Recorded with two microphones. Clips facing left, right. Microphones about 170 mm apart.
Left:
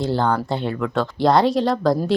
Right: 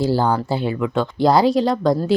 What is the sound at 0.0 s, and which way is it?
Speech, 5° right (ahead or behind).